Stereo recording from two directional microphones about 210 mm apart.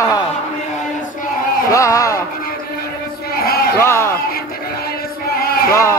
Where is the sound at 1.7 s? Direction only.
15° left (ahead or behind).